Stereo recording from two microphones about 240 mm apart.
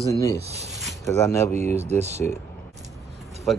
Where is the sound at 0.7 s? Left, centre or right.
Centre.